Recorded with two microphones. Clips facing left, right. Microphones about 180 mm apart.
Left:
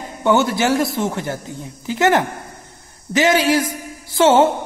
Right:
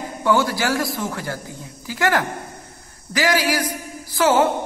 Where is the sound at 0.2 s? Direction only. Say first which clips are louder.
Left 3 dB; 25° left (ahead or behind).